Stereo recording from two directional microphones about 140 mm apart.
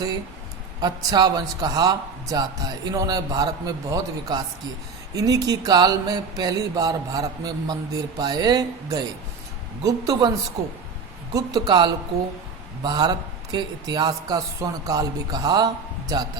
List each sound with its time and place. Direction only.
0.8 s mantra: 30° right (ahead or behind)
11.3 s mantra: 25° right (ahead or behind)